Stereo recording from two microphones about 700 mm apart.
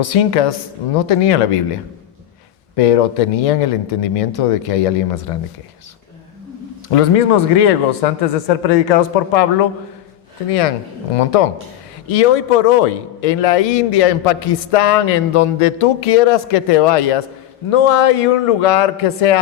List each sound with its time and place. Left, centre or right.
0.0 s a man's voice: left
2.7 s a man's voice: left
6.8 s a man's voice: left
11.1 s a man's voice: left